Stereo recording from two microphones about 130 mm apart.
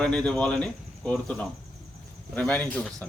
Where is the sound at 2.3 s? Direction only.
10° left (ahead or behind).